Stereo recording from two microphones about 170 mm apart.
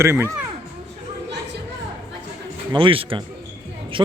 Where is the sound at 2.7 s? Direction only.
30° right (ahead or behind).